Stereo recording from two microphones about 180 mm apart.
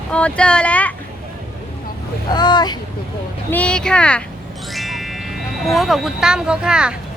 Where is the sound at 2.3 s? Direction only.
25° left (ahead or behind).